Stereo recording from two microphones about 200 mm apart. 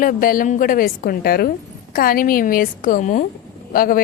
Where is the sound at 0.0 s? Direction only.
45° left (ahead or behind).